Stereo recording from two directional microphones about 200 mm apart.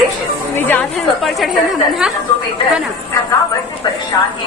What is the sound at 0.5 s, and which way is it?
A woman's voice, 10° left (ahead or behind).